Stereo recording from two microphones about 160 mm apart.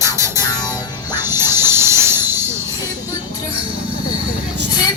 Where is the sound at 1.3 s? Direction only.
15° right (ahead or behind).